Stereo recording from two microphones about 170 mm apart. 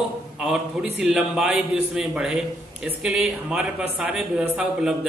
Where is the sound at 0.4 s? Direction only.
5° right (ahead or behind).